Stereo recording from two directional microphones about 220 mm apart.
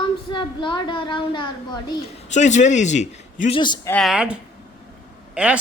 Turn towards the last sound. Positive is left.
turn(degrees=-5)  # may be behind; listen again after turning